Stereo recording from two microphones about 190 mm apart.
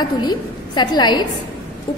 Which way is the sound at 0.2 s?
20° left (ahead or behind).